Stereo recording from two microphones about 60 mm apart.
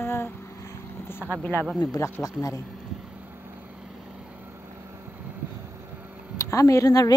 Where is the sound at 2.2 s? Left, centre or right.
Left.